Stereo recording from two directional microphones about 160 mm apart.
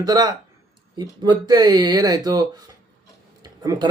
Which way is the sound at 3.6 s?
20° right (ahead or behind).